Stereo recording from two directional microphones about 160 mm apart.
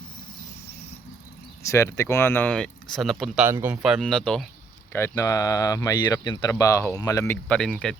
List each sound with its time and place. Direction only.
1.7 s speech: 20° left (ahead or behind); by 3.4 s centre (ahead or behind)
3.4 s speech: 15° right (ahead or behind); by 4.4 s 5° left (ahead or behind)
4.9 s speech: 15° left (ahead or behind)